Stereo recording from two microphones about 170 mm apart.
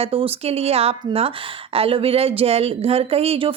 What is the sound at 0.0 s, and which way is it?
Speech, 35° right (ahead or behind).